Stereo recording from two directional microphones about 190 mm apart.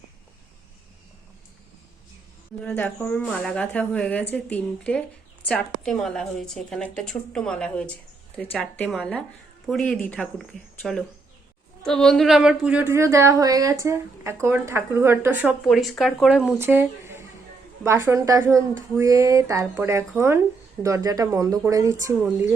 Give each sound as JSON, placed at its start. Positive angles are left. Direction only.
{"t": 2.6, "sound": "a woman's voice", "side_deg": 10}